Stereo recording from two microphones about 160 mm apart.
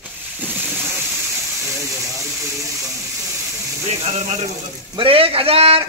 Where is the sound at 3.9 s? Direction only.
45° right (ahead or behind).